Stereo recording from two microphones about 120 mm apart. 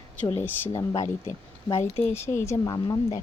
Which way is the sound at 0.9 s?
25° left (ahead or behind).